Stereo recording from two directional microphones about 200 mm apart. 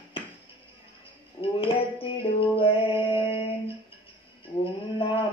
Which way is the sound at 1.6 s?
25° left (ahead or behind).